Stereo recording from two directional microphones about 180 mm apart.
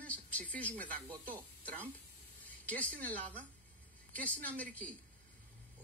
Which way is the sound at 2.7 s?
10° left (ahead or behind).